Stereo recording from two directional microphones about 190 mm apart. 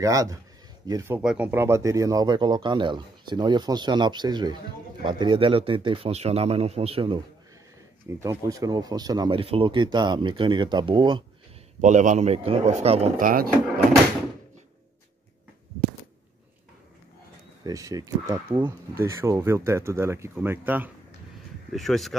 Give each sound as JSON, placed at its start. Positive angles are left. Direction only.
{"t": 0.0, "sound": "speech", "side_deg": -20}
{"t": 8.2, "sound": "speech", "side_deg": -15}
{"t": 11.8, "sound": "speech", "side_deg": -40}
{"t": 13.2, "sound": "speech", "side_deg": -45}
{"t": 17.6, "sound": "speech", "side_deg": -20}
{"t": 21.7, "sound": "speech", "side_deg": 0}